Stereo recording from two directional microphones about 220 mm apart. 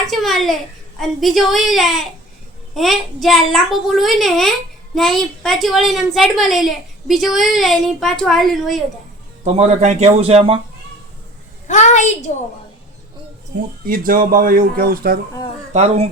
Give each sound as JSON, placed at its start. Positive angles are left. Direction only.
{"t": 0.1, "sound": "a woman's voice", "side_deg": 0}
{"t": 9.4, "sound": "a man's voice", "side_deg": -30}
{"t": 11.7, "sound": "a woman's voice", "side_deg": 30}
{"t": 13.8, "sound": "speech", "side_deg": -40}
{"t": 15.7, "sound": "a man's voice", "side_deg": -30}